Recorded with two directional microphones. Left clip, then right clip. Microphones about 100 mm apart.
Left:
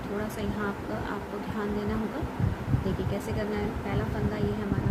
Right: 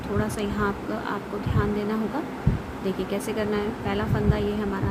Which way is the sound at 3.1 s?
45° right (ahead or behind).